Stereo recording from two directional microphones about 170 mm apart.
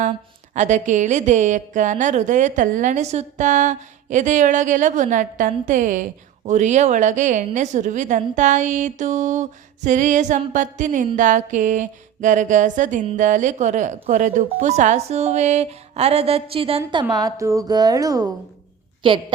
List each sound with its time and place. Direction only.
0.5 s a woman's voice: 45° right (ahead or behind); by 19.2 s 30° right (ahead or behind)